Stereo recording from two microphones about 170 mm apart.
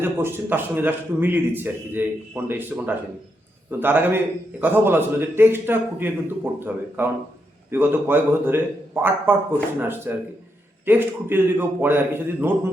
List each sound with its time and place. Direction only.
0.0 s speech: 15° right (ahead or behind)